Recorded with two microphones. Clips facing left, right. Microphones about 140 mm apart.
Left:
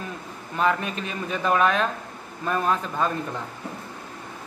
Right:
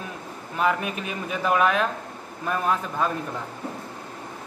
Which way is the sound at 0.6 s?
10° right (ahead or behind).